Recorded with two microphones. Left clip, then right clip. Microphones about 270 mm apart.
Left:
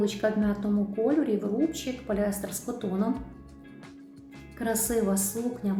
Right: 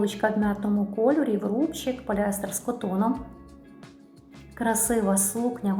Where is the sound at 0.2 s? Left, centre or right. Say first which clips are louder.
Right 2 dB; centre.